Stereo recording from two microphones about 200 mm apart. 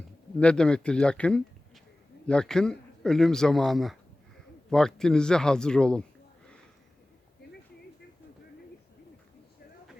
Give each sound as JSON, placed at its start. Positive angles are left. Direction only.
{"t": 0.3, "sound": "speech", "side_deg": 5}